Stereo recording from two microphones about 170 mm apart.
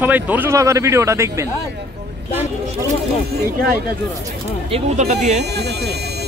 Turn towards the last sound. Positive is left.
turn(degrees=-75)  # may be behind; listen again after turning